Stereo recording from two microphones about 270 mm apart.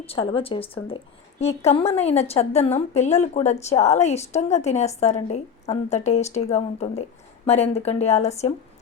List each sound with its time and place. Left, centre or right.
0.0 s a woman's voice: left